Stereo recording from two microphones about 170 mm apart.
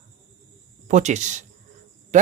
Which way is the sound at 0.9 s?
45° right (ahead or behind).